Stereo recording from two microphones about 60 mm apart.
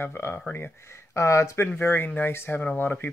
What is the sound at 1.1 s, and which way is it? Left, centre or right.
Speech, left.